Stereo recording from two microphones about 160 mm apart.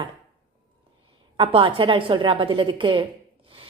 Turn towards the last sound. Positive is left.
turn(degrees=-30)  # may be behind; listen again after turning